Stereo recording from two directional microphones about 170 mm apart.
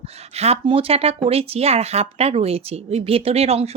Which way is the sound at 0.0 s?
40° right (ahead or behind).